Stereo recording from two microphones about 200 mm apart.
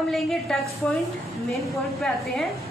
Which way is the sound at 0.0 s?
Centre (ahead or behind).